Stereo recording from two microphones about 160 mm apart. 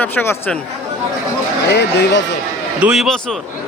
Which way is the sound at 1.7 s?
90° left.